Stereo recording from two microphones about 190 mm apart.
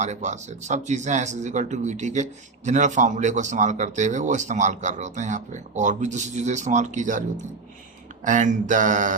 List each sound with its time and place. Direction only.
0.0 s speech: 40° right (ahead or behind)